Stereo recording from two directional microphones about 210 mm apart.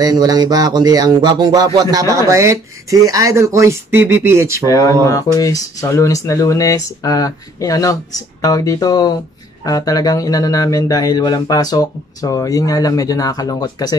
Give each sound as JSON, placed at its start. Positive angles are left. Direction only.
{"t": 0.0, "sound": "music", "side_deg": -20}
{"t": 2.2, "sound": "speech", "side_deg": -15}
{"t": 4.6, "sound": "speech", "side_deg": 15}